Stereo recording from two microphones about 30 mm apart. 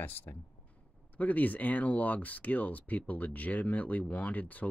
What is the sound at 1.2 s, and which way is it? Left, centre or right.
Speech, left.